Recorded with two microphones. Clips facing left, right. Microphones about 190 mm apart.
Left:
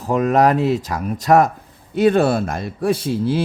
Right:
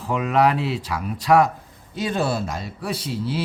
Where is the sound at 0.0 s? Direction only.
45° left (ahead or behind).